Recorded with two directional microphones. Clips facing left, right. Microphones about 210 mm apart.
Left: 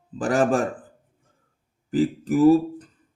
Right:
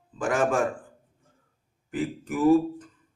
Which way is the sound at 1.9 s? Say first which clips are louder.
Left 8 dB; 35° left (ahead or behind).